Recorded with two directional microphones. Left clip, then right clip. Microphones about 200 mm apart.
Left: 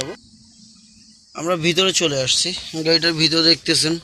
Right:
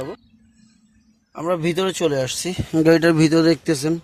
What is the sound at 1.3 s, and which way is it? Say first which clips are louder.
Speech: left 2 dB; 15° right (ahead or behind).